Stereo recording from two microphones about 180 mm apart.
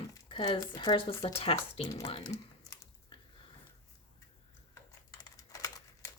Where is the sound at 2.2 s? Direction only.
20° left (ahead or behind).